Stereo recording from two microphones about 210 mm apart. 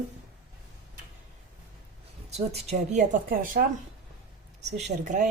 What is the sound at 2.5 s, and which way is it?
Speech, 30° right (ahead or behind).